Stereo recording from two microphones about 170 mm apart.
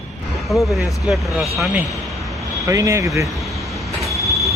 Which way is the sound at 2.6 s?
20° right (ahead or behind).